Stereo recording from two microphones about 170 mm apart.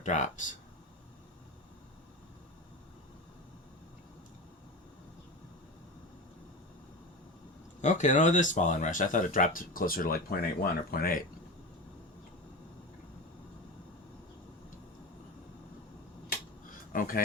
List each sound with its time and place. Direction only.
0.0 s speech: 45° left (ahead or behind)
7.8 s speech: 45° left (ahead or behind)
16.9 s speech: 55° left (ahead or behind)